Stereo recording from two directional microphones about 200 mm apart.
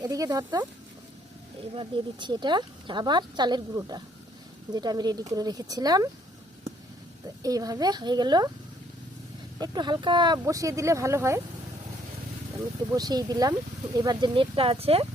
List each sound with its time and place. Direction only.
0.0 s speech: 20° right (ahead or behind)
1.7 s speech: 25° right (ahead or behind)
7.4 s speech: 20° right (ahead or behind)
9.6 s speech: 20° right (ahead or behind)
12.9 s speech: 20° right (ahead or behind)